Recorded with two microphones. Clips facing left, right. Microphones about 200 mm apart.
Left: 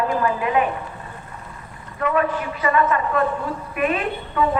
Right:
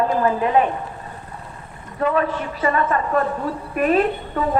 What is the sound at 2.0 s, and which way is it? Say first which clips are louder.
A woman's voice: right 1 dB; 35° right (ahead or behind).